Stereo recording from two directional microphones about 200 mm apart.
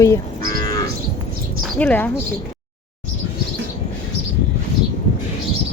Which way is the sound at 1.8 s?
10° left (ahead or behind).